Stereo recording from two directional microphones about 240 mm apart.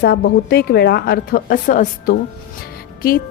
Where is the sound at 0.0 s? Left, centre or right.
Left.